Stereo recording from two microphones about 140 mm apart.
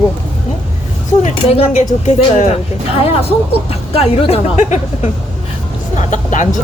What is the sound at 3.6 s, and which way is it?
Speech, 45° left (ahead or behind).